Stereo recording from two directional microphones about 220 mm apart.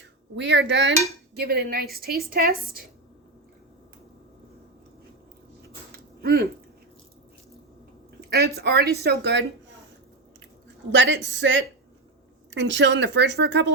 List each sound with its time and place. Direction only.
0.0 s a woman's voice: 55° right (ahead or behind)
5.6 s a sound: 45° right (ahead or behind)
8.3 s a woman's voice: 50° right (ahead or behind)
10.9 s a woman's voice: 55° right (ahead or behind)